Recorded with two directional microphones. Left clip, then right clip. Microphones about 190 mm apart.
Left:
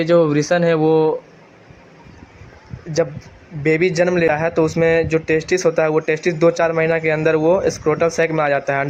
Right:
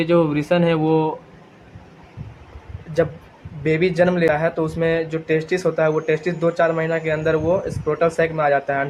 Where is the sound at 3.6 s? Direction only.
35° left (ahead or behind).